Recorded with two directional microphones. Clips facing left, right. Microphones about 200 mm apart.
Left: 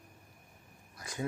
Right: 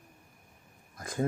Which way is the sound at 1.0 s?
50° right (ahead or behind).